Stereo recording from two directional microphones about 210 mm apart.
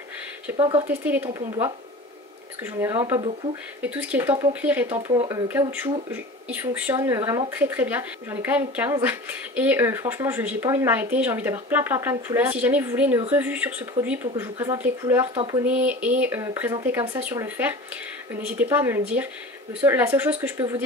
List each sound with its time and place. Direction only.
0.6 s speech: 25° right (ahead or behind)
0.8 s speech: 10° right (ahead or behind)
15.6 s speech: 5° right (ahead or behind)